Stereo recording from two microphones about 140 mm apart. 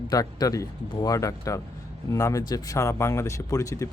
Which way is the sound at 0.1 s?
25° left (ahead or behind).